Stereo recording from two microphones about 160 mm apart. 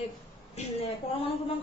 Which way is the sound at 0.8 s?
35° left (ahead or behind).